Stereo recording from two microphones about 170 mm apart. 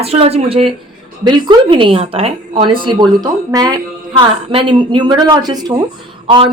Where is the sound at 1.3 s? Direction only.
25° right (ahead or behind).